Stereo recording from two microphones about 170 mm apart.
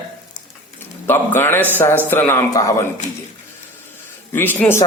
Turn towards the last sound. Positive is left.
turn(degrees=10)  # may be behind; listen again after turning